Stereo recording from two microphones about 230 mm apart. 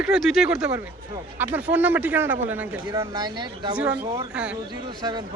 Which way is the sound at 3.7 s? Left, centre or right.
Centre.